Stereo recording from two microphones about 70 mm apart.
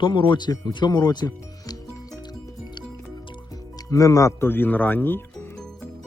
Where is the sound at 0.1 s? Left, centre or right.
Left.